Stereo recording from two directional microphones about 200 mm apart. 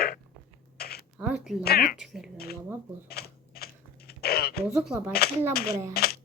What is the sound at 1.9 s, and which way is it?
Speech, centre (ahead or behind).